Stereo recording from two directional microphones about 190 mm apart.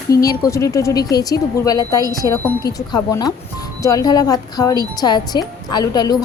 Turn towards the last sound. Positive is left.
turn(degrees=20)  # may be behind; listen again after turning